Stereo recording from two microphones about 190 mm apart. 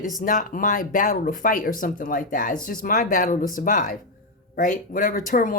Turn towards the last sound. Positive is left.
turn(degrees=45)  # may be behind; listen again after turning